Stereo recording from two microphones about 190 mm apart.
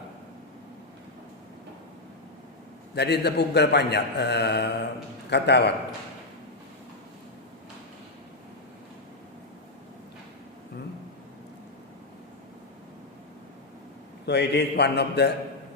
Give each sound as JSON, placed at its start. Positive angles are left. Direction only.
{"t": 2.9, "sound": "a man's voice", "side_deg": 60}
{"t": 14.3, "sound": "a man's voice", "side_deg": 65}